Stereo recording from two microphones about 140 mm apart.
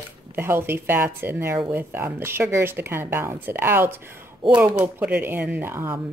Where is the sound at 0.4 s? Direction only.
15° right (ahead or behind).